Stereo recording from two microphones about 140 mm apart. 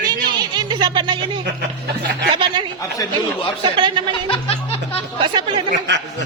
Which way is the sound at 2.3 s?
35° right (ahead or behind).